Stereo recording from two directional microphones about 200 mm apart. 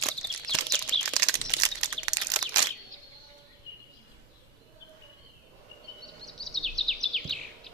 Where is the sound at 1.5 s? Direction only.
20° right (ahead or behind).